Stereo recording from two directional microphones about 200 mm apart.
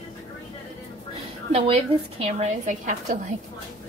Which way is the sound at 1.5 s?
30° right (ahead or behind).